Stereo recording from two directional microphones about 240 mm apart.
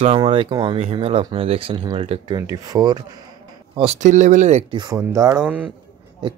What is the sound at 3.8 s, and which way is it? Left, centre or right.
Speech, right.